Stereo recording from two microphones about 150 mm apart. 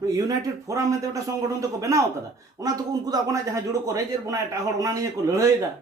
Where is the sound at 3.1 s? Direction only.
20° right (ahead or behind).